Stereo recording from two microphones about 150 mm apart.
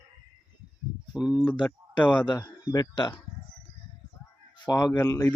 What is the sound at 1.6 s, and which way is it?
Speech, 10° left (ahead or behind).